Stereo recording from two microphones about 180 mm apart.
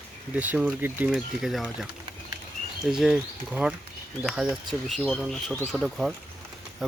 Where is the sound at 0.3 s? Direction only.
10° right (ahead or behind).